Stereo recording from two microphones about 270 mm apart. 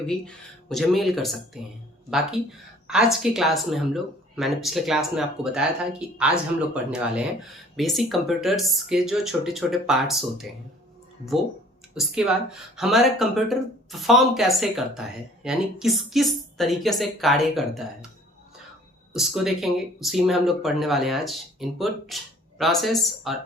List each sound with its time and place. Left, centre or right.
0.0 s speech: centre
11.9 s speech: centre
19.1 s speech: centre